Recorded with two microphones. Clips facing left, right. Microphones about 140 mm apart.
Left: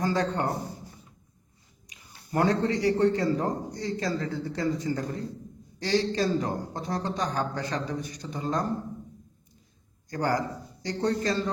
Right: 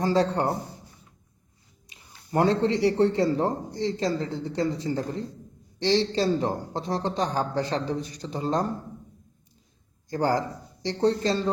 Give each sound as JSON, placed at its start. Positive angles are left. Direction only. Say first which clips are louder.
{"t": 0.0, "sound": "speech", "louder": "right 4 dB", "side_deg": -30}
{"t": 1.9, "sound": "a man's voice", "louder": "right 3 dB", "side_deg": -30}
{"t": 10.1, "sound": "speech", "louder": "right 3 dB", "side_deg": -30}